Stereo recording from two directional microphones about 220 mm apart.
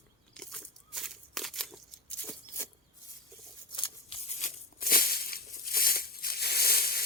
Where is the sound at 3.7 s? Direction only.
25° left (ahead or behind).